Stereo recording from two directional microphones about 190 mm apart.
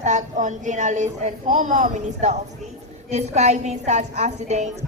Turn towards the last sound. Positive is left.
turn(degrees=-35)  # may be behind; listen again after turning